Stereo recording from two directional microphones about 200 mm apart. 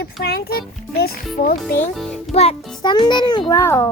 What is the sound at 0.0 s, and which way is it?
A child's voice, 50° left (ahead or behind).